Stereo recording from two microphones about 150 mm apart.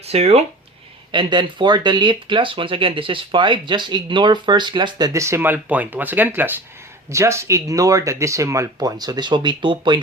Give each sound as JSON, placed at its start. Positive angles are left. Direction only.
{"t": 0.0, "sound": "speech", "side_deg": -45}
{"t": 1.1, "sound": "speech", "side_deg": -30}